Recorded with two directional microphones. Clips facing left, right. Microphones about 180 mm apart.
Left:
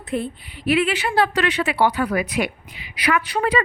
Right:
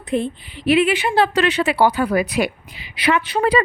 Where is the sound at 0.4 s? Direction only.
90° right.